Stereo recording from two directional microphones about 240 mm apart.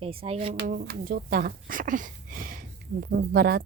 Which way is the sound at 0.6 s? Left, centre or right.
Right.